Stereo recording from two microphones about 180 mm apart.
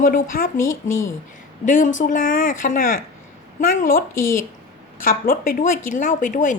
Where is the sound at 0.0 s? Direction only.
50° left (ahead or behind).